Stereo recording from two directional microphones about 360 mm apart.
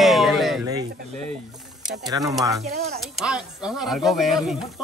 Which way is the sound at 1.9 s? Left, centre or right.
Centre.